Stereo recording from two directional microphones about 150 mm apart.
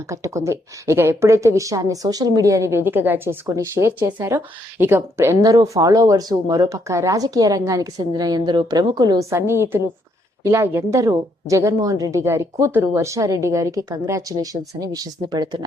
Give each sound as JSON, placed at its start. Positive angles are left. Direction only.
{"t": 0.1, "sound": "a woman's voice", "side_deg": -20}